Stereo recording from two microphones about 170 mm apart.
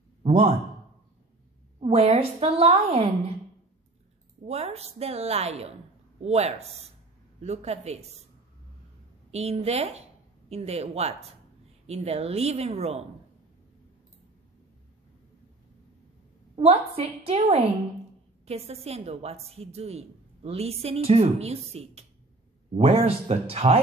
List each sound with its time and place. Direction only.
0.2 s a man's voice: 35° right (ahead or behind)
1.8 s a woman's voice: 35° right (ahead or behind)
4.5 s a woman's voice: 35° right (ahead or behind)
9.3 s a woman's voice: 40° right (ahead or behind)
16.5 s a woman's voice: 35° right (ahead or behind)